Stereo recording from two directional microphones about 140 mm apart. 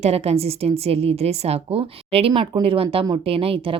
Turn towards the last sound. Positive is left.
turn(degrees=-40)  # may be behind; listen again after turning